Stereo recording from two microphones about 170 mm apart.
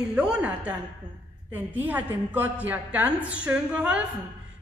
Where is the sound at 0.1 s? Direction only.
5° right (ahead or behind).